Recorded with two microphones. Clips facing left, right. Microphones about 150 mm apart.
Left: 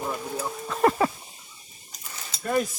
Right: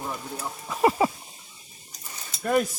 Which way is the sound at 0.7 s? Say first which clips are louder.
Even; 10° right (ahead or behind).